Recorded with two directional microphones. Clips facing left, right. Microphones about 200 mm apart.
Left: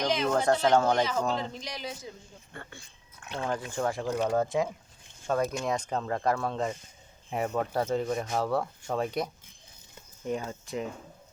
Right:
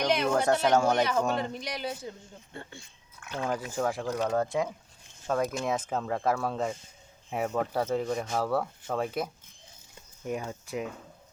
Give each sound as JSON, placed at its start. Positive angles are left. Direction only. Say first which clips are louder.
{"t": 0.0, "sound": "speech", "louder": "right 1 dB", "side_deg": -70}
{"t": 0.3, "sound": "speech", "louder": "left 2 dB", "side_deg": -10}
{"t": 1.4, "sound": "a man's voice", "louder": "right 3 dB", "side_deg": -60}
{"t": 3.4, "sound": "speech", "louder": "right 1 dB", "side_deg": -10}
{"t": 10.5, "sound": "speech", "louder": "even", "side_deg": -10}